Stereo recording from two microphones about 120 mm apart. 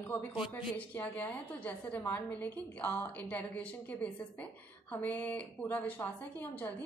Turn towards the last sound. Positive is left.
turn(degrees=15)  # may be behind; listen again after turning